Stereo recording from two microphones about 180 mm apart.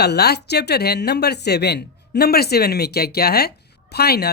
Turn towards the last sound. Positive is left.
turn(degrees=60)  # may be behind; listen again after turning